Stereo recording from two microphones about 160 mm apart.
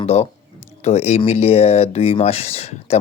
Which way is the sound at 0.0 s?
40° left (ahead or behind).